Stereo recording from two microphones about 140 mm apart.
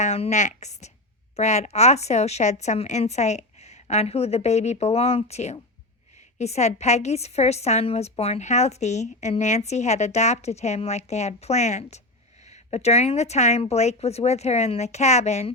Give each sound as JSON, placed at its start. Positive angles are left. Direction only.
{"t": 0.0, "sound": "a woman's voice", "side_deg": 55}